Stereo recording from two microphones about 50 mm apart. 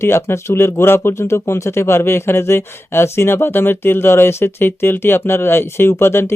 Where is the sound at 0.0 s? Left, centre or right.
Left.